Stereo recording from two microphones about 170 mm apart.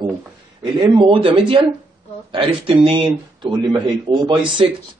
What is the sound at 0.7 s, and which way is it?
Speech, 30° right (ahead or behind).